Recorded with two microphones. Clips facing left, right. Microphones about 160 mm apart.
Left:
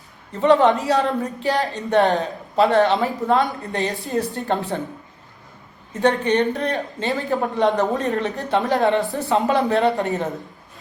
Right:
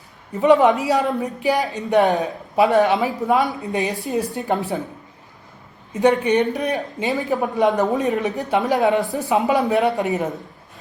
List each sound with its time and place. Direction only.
0.3 s speech: 10° right (ahead or behind)
5.9 s speech: 10° right (ahead or behind)
6.7 s speech: centre (ahead or behind)
7.5 s speech: 15° right (ahead or behind)